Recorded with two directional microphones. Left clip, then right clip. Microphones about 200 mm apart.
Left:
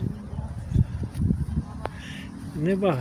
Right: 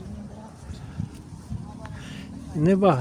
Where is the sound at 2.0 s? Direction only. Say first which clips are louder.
Left 2 dB; 30° right (ahead or behind).